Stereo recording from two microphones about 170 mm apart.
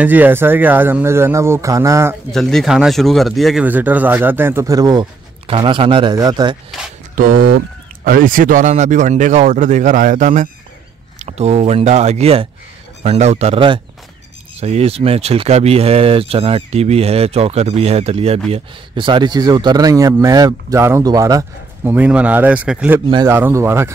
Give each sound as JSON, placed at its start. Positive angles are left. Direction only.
{"t": 0.0, "sound": "speech", "side_deg": -10}
{"t": 2.3, "sound": "speech", "side_deg": 0}
{"t": 7.2, "sound": "speech", "side_deg": -55}
{"t": 21.9, "sound": "speech", "side_deg": -10}